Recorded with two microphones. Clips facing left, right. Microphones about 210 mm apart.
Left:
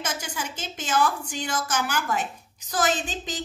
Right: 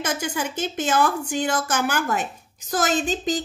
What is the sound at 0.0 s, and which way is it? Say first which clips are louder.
A woman's voice: right 6 dB; 60° right (ahead or behind).